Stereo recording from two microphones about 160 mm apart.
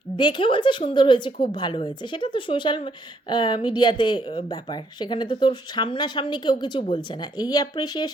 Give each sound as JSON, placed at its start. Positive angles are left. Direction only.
{"t": 0.2, "sound": "a woman's voice", "side_deg": 30}